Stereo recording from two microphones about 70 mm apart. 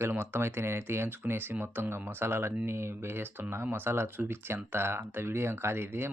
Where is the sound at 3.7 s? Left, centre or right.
Right.